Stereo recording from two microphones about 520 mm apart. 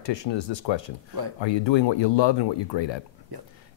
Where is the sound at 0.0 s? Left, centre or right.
Left.